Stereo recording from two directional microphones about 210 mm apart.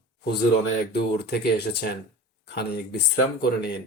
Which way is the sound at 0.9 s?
50° left (ahead or behind).